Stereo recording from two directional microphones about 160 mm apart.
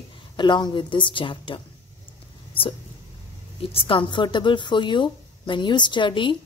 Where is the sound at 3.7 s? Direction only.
30° left (ahead or behind).